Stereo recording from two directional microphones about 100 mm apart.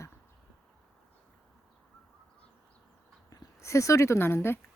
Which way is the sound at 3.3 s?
40° left (ahead or behind).